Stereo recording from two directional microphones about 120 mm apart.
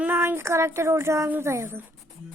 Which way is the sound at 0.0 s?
15° right (ahead or behind).